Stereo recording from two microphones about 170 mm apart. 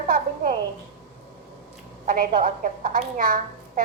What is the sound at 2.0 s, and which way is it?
A woman's voice, 55° right (ahead or behind).